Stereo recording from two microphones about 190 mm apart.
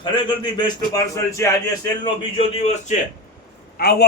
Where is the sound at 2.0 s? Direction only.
30° left (ahead or behind).